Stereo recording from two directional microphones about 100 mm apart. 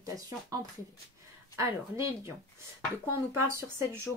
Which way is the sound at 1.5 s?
30° right (ahead or behind).